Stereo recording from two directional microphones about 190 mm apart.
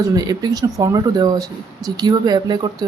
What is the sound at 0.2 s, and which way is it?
Speech, 20° right (ahead or behind).